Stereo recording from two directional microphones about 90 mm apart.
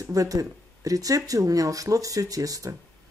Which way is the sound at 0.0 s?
40° right (ahead or behind).